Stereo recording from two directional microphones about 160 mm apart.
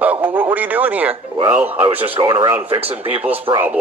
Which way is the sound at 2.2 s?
20° right (ahead or behind).